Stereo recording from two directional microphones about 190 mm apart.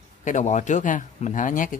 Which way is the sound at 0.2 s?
40° left (ahead or behind).